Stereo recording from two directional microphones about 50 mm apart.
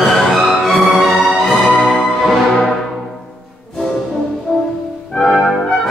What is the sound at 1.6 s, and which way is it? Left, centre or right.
Music, left.